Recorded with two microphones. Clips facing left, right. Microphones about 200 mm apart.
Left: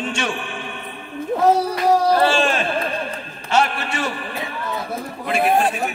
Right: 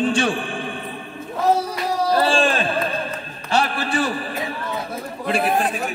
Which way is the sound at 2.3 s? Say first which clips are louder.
Even; 30° right (ahead or behind).